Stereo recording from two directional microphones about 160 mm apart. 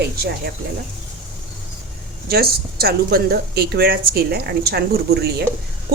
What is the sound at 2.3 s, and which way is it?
A woman's voice, 75° right (ahead or behind).